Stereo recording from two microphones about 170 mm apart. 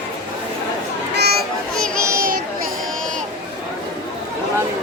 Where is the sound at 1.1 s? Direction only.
70° right (ahead or behind).